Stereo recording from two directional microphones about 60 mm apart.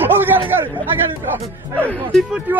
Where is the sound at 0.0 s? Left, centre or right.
Right.